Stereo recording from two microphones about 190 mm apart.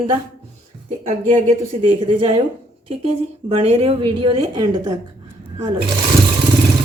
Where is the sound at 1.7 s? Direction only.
25° right (ahead or behind).